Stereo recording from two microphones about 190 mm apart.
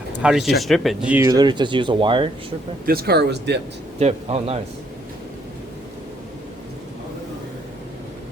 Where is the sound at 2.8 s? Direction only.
55° right (ahead or behind).